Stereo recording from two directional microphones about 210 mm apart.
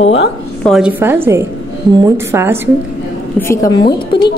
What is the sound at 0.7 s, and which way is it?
A woman's voice, 5° right (ahead or behind).